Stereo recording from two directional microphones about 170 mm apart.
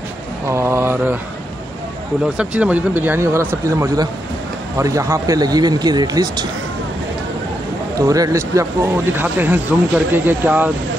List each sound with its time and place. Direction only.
0.5 s speech: 15° right (ahead or behind)
2.2 s speech: 5° right (ahead or behind); by 6.4 s 25° right (ahead or behind)
8.0 s speech: 20° right (ahead or behind)